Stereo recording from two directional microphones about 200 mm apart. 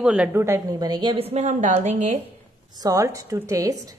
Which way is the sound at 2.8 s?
15° right (ahead or behind).